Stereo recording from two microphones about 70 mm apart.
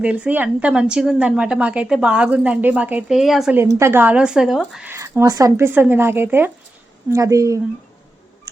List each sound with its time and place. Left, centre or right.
0.0 s a woman's voice: centre
3.1 s speech: centre
3.6 s speech: right
4.0 s a woman's voice: centre
5.2 s speech: right
5.5 s speech: right
7.1 s speech: right